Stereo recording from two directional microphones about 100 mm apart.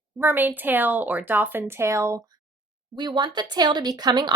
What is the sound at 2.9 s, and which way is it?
Speech, 50° right (ahead or behind).